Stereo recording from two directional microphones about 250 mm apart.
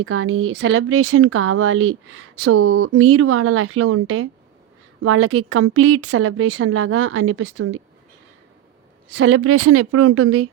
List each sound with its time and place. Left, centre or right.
0.0 s speech: right
9.1 s speech: right